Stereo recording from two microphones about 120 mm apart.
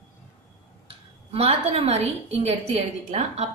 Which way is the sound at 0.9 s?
55° right (ahead or behind).